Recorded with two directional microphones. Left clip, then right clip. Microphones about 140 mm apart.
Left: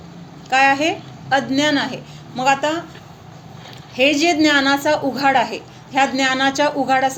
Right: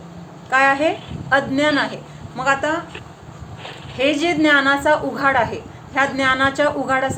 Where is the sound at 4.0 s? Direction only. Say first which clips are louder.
Left 2 dB; 40° left (ahead or behind).